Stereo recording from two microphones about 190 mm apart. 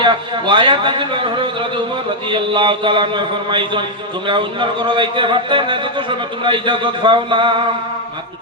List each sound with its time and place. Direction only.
0.0 s speech: 25° right (ahead or behind)